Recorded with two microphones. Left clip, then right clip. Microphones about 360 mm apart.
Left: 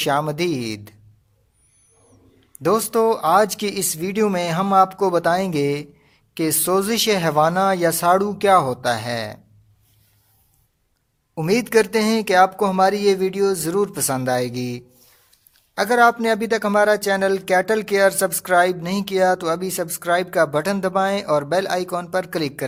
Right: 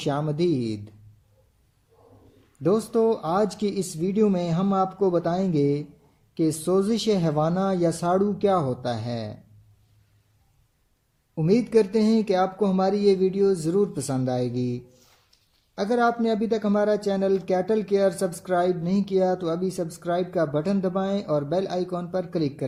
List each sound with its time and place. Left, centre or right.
0.0 s speech: centre
2.9 s speech: left
11.4 s speech: left